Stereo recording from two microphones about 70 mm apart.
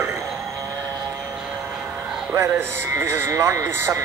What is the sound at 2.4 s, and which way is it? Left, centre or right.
Speech, right.